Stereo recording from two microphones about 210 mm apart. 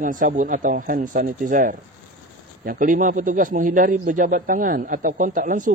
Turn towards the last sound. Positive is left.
turn(degrees=-40)  # may be behind; listen again after turning